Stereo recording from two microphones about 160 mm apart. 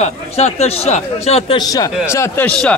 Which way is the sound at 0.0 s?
45° left (ahead or behind).